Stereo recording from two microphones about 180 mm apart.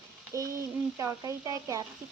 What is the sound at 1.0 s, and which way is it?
Speech, 15° right (ahead or behind).